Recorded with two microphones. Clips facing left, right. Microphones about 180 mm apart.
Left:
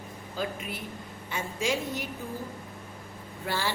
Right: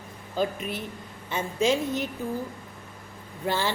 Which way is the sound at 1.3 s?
20° right (ahead or behind).